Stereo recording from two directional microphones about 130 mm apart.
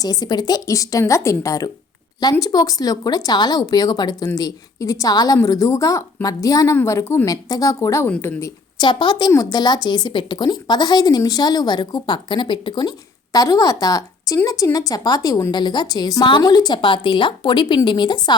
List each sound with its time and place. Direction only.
0.0 s a woman's voice: 30° left (ahead or behind); by 8.4 s 15° left (ahead or behind)
8.4 s a woman's voice: 25° left (ahead or behind)
8.9 s a woman's voice: 35° left (ahead or behind)